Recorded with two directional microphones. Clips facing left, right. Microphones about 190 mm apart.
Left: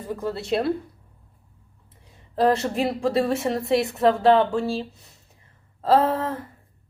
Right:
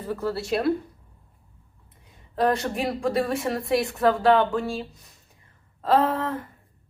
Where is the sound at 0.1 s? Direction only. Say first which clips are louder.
Left 1 dB; 20° left (ahead or behind).